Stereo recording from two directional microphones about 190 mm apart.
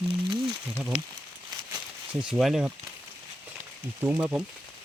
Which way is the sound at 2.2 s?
5° right (ahead or behind).